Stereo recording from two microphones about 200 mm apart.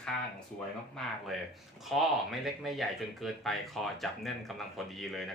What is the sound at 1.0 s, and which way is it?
Speech, 5° left (ahead or behind).